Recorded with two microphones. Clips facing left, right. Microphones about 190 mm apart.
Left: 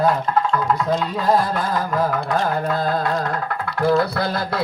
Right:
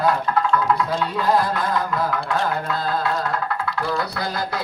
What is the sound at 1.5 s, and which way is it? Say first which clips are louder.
Gargling: left 2 dB; 45° left (ahead or behind).